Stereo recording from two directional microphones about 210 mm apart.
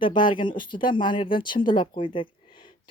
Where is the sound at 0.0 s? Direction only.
20° left (ahead or behind).